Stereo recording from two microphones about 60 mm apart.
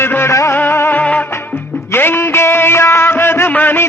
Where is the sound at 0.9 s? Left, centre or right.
Left.